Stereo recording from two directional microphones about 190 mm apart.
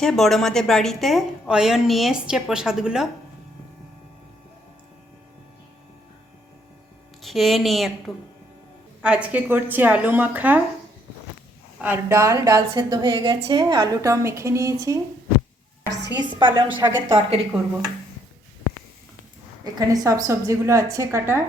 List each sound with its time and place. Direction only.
0.0 s a woman's voice: centre (ahead or behind)
7.2 s a woman's voice: centre (ahead or behind)
11.8 s a woman's voice: 10° right (ahead or behind)
15.9 s a woman's voice: 65° right (ahead or behind)
16.1 s a woman's voice: 25° right (ahead or behind)
19.6 s a woman's voice: 20° right (ahead or behind)